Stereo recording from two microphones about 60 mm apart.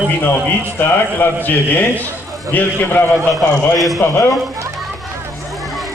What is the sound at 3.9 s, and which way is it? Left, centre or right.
Speech, left.